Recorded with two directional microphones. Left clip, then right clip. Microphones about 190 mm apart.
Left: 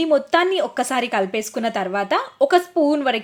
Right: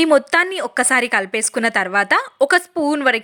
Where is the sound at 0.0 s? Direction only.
20° right (ahead or behind).